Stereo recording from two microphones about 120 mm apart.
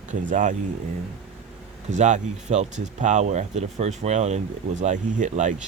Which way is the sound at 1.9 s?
80° right.